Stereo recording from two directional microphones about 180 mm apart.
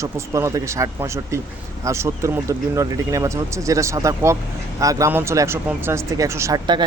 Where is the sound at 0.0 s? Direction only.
15° right (ahead or behind).